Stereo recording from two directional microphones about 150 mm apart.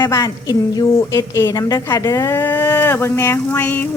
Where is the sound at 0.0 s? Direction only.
25° left (ahead or behind).